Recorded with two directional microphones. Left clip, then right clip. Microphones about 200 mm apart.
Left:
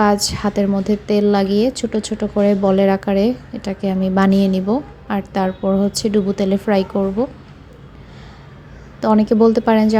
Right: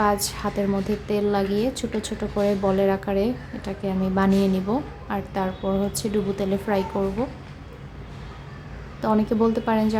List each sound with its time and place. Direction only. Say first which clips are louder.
0.0 s a woman's voice: left 6 dB; 25° left (ahead or behind)
9.0 s a woman's voice: left 8 dB; 25° left (ahead or behind)